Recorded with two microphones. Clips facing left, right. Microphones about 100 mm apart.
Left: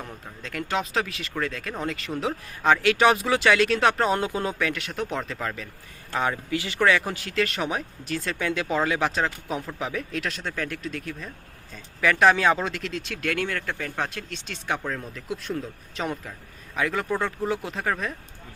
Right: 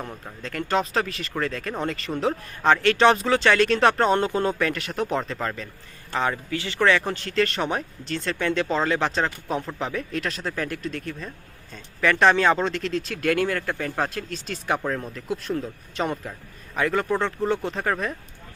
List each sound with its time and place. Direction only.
0.4 s speech: centre (ahead or behind)
6.1 s speech: 15° left (ahead or behind)
6.7 s speech: 5° left (ahead or behind)